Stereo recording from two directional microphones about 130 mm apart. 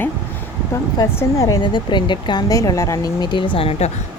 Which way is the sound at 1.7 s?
35° left (ahead or behind).